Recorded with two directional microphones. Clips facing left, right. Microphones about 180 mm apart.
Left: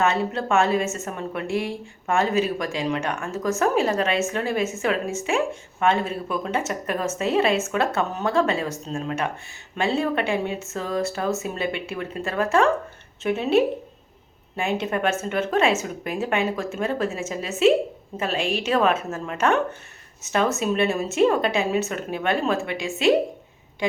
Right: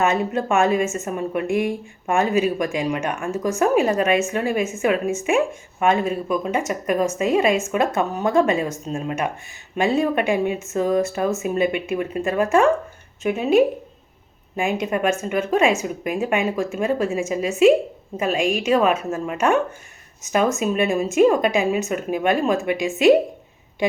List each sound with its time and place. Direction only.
0.0 s a woman's voice: 15° right (ahead or behind)